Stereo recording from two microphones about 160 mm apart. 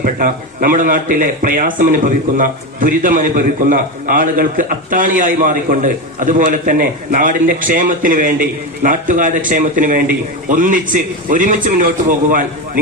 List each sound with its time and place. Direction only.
0.0 s a man's voice: 60° right (ahead or behind)